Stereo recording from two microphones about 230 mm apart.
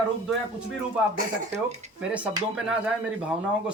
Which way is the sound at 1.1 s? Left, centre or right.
Right.